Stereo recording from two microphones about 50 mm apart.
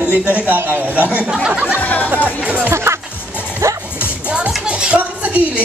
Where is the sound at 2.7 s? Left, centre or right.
Right.